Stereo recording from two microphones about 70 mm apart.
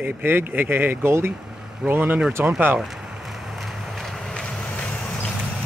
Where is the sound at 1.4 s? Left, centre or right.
Centre.